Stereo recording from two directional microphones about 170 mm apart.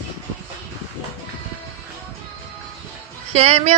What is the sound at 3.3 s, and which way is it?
Speech, 40° right (ahead or behind).